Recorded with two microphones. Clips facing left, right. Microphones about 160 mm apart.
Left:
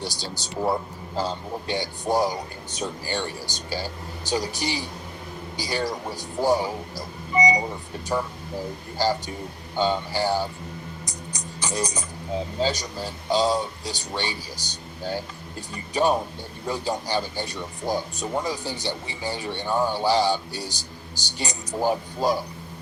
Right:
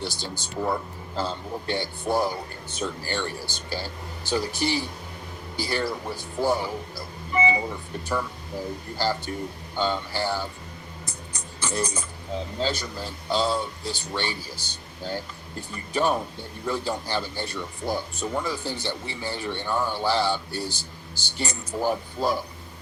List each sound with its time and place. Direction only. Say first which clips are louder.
1.1 s speech: left 2 dB; 15° left (ahead or behind)
7.3 s a sound: left 2 dB; 15° left (ahead or behind)
9.0 s speech: left 3 dB; 15° left (ahead or behind)
11.0 s music: left 3 dB; 15° left (ahead or behind)
12.5 s speech: left 2 dB; 15° left (ahead or behind)